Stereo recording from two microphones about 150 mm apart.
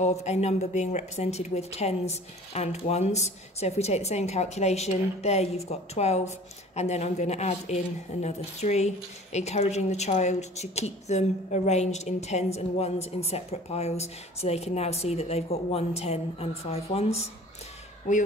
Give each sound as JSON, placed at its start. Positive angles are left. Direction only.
{"t": 0.0, "sound": "a woman's voice", "side_deg": 50}
{"t": 18.1, "sound": "speech", "side_deg": 55}